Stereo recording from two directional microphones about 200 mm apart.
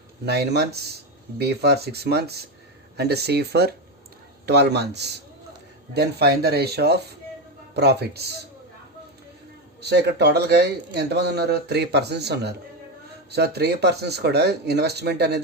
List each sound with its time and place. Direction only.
0.3 s speech: 55° right (ahead or behind)
9.8 s speech: 55° right (ahead or behind)